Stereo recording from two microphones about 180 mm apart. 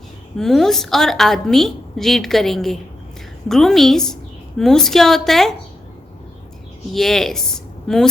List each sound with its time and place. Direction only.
0.3 s a woman's voice: centre (ahead or behind)
6.9 s a woman's voice: centre (ahead or behind)